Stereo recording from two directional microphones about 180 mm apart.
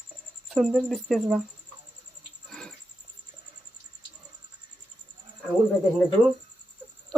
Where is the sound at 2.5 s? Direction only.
5° left (ahead or behind).